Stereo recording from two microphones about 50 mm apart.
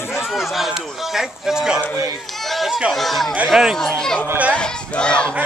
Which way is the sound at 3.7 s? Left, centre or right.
Centre.